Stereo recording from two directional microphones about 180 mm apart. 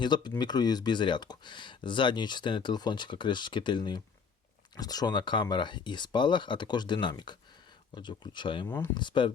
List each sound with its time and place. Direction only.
0.0 s speech: 25° left (ahead or behind)
8.6 s speech: 10° left (ahead or behind)
9.0 s speech: 25° left (ahead or behind)